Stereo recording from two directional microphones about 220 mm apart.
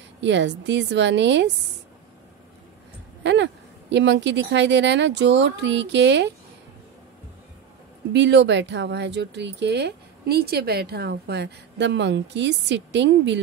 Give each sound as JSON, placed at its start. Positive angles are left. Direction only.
{"t": 0.2, "sound": "speech", "side_deg": -55}
{"t": 3.3, "sound": "speech", "side_deg": -55}
{"t": 8.1, "sound": "speech", "side_deg": -50}